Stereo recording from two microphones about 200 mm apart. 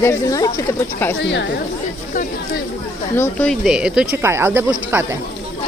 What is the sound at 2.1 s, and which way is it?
Speech, 40° left (ahead or behind).